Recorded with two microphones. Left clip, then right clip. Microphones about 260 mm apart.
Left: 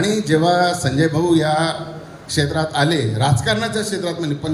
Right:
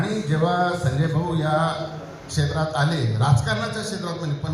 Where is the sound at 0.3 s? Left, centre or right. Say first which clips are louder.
Left 6 dB; left.